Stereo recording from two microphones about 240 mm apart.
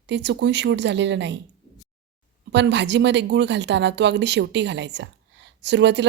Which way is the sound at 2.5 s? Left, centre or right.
Right.